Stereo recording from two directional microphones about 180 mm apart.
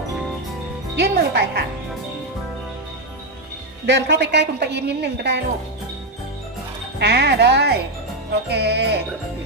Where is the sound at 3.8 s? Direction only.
75° right (ahead or behind).